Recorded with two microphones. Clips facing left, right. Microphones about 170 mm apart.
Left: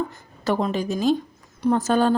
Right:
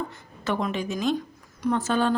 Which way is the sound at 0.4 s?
35° left (ahead or behind).